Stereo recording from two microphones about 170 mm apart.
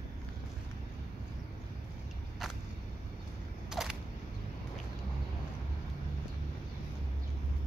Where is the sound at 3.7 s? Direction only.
5° right (ahead or behind).